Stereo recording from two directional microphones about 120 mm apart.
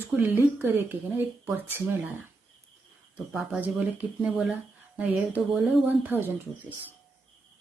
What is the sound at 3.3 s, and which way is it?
Speech, 10° right (ahead or behind).